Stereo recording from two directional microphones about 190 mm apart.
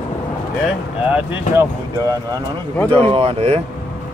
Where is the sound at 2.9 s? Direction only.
25° right (ahead or behind).